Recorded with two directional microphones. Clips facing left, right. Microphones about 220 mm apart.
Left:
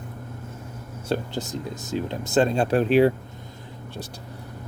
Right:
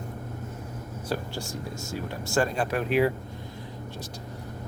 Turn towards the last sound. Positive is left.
turn(degrees=30)  # may be behind; listen again after turning